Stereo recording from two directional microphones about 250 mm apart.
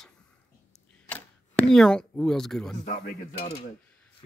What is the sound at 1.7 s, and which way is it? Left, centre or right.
Speech, centre.